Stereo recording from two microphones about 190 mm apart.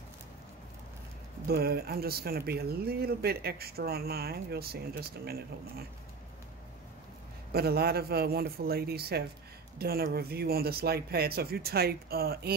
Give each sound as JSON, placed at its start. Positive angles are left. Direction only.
{"t": 1.5, "sound": "speech", "side_deg": -55}
{"t": 7.5, "sound": "speech", "side_deg": -55}